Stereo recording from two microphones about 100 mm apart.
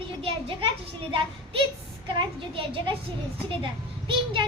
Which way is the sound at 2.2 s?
60° right (ahead or behind).